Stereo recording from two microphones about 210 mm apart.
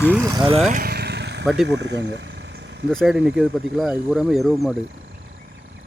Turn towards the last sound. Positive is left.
turn(degrees=0)  # may be behind; listen again after turning